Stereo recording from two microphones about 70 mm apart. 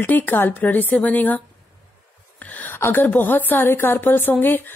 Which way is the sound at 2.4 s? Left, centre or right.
Left.